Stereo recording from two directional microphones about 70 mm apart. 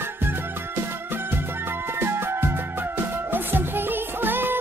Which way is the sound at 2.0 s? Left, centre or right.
Right.